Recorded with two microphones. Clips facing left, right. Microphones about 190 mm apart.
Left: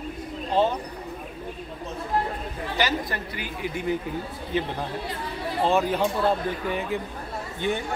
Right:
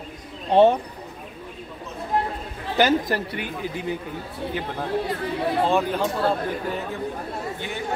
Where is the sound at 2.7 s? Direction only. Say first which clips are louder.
Right 7 dB; 50° right (ahead or behind).